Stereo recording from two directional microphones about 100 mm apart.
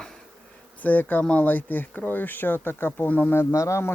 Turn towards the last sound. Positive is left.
turn(degrees=30)  # may be behind; listen again after turning